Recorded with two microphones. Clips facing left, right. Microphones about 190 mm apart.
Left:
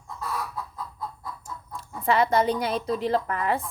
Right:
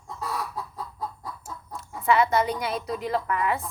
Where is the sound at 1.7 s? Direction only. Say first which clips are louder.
Right 1 dB; 35° left (ahead or behind).